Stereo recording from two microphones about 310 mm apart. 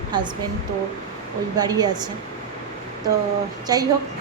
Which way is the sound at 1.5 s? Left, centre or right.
Centre.